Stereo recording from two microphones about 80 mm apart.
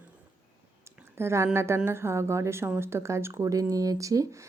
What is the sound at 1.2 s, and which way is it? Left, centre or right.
A woman's voice, right.